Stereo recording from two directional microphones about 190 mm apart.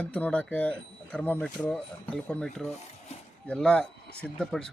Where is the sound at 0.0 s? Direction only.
5° left (ahead or behind).